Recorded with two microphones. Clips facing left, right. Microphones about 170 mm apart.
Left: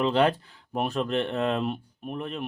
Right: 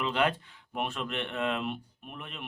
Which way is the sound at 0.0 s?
35° left (ahead or behind).